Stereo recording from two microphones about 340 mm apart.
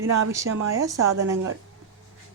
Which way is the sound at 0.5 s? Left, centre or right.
Right.